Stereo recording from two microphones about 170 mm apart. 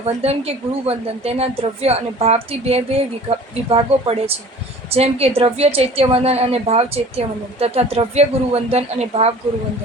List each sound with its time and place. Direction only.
0.2 s a woman's voice: 35° right (ahead or behind)